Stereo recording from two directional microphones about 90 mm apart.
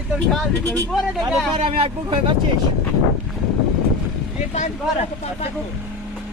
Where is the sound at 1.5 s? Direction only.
85° right.